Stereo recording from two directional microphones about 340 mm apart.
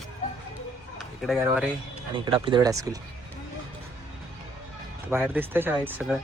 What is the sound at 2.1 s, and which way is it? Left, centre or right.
Speech, centre.